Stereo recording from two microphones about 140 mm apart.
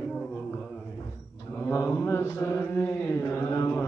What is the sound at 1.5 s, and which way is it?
Mantra, 15° left (ahead or behind).